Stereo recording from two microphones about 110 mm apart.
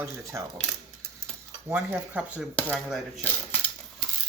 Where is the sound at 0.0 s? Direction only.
25° right (ahead or behind).